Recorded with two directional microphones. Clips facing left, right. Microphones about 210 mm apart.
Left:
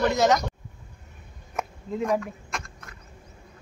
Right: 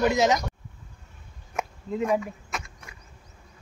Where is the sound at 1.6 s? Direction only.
5° right (ahead or behind).